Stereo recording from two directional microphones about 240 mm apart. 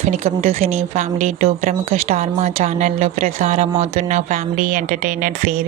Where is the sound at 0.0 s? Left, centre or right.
Right.